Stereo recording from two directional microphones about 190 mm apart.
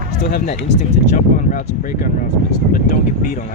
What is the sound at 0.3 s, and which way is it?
Speech, 50° left (ahead or behind).